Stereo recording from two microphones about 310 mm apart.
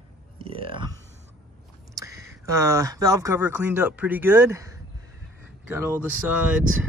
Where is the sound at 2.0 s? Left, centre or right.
Centre.